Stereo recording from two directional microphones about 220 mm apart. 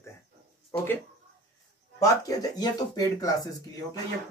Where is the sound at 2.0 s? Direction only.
15° left (ahead or behind).